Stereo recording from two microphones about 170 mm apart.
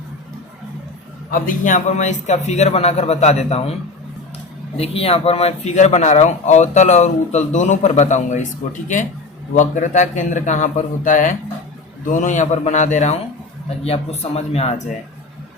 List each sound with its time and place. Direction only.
1.3 s a man's voice: 50° left (ahead or behind)
4.8 s speech: 35° left (ahead or behind)
9.6 s a man's voice: 45° left (ahead or behind)